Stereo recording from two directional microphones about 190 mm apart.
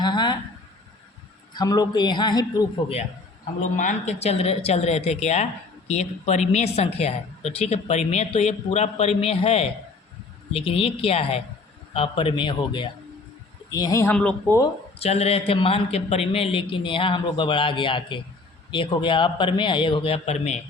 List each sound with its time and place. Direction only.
0.0 s a sound: 25° left (ahead or behind)
1.5 s a man's voice: 20° left (ahead or behind)
3.6 s a woman's voice: 40° left (ahead or behind); by 14.7 s 10° left (ahead or behind)
14.9 s a man's voice: 35° left (ahead or behind)